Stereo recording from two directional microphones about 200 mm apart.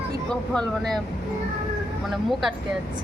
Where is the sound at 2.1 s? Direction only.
Centre (ahead or behind).